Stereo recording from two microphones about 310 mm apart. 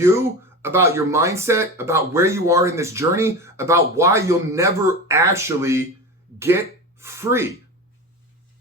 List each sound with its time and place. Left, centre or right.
0.0 s speech: centre